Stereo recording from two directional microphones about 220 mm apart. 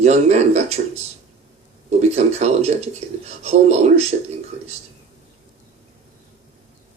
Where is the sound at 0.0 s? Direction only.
30° right (ahead or behind).